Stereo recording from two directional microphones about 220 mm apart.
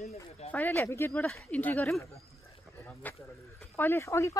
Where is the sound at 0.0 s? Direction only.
30° left (ahead or behind).